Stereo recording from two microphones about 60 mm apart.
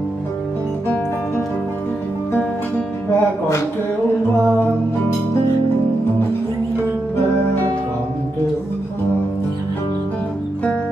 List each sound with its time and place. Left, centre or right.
3.1 s music: left